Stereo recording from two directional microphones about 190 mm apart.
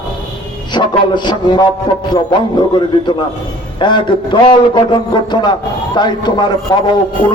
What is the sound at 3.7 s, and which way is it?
A man's voice, 25° left (ahead or behind).